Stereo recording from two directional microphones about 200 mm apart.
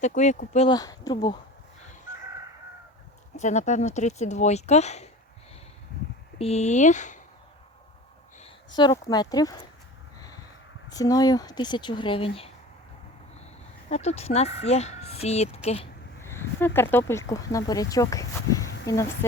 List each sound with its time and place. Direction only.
0.0 s speech: 35° left (ahead or behind)
0.8 s speech: 20° left (ahead or behind)
3.3 s speech: 35° left (ahead or behind)
6.4 s speech: 35° left (ahead or behind)
8.4 s speech: 25° left (ahead or behind)
10.9 s speech: 20° left (ahead or behind)
13.9 s speech: 35° left (ahead or behind)
16.2 s speech: 10° left (ahead or behind)